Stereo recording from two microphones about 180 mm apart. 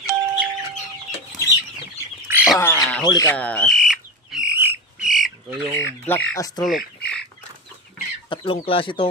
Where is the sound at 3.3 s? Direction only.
5° left (ahead or behind).